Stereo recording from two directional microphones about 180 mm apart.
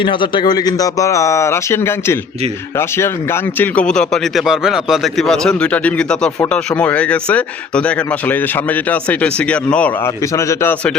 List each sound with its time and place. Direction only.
0.0 s a man's voice: 25° left (ahead or behind)